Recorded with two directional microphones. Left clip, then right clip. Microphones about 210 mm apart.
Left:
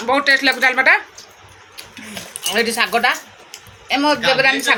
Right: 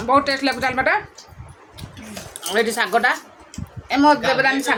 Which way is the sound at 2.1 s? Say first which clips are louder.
Left 2 dB; 15° right (ahead or behind).